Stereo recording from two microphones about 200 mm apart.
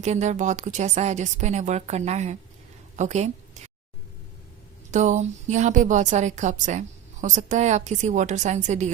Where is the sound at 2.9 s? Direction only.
35° right (ahead or behind).